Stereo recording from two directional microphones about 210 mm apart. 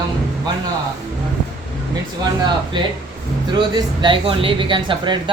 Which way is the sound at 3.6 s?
20° right (ahead or behind).